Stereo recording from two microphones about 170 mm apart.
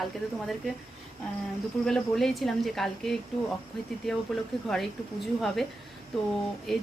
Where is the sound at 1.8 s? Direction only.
5° left (ahead or behind).